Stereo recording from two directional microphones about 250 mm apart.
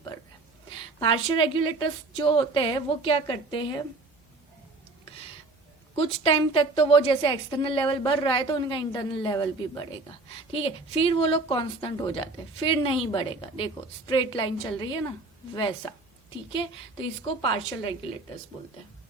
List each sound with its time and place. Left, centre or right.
0.9 s a woman's voice: centre
6.0 s a woman's voice: left
16.5 s a woman's voice: centre